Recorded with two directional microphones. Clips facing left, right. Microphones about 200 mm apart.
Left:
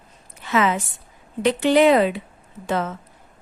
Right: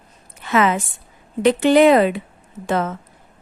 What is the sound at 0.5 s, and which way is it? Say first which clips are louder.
A woman's voice: right 3 dB; 55° right (ahead or behind).